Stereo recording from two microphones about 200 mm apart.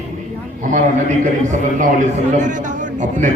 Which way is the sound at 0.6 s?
40° right (ahead or behind).